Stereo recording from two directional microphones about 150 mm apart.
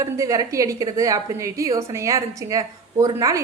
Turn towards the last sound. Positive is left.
turn(degrees=-20)  # may be behind; listen again after turning